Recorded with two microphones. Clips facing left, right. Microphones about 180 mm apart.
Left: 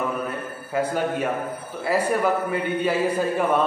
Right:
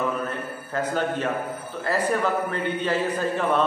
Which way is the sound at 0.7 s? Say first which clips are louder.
Left 2 dB; 10° left (ahead or behind).